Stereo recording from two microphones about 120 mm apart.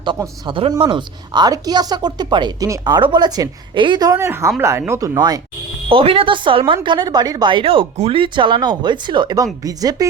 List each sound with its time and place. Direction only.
0.4 s a woman's voice: 45° right (ahead or behind); by 5.4 s 30° right (ahead or behind)
5.9 s a woman's voice: 50° right (ahead or behind)
6.8 s speech: 35° right (ahead or behind)